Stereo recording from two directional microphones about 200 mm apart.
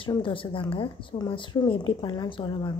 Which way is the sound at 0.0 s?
25° left (ahead or behind).